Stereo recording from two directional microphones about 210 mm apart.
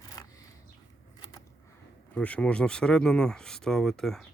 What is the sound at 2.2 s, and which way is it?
Speech, 5° left (ahead or behind).